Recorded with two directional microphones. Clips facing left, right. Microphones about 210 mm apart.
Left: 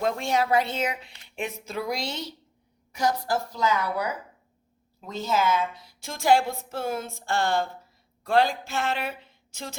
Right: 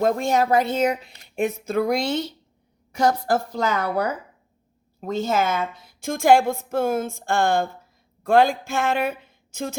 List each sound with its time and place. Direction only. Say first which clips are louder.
0.0 s a woman's voice: right 5 dB; 45° right (ahead or behind)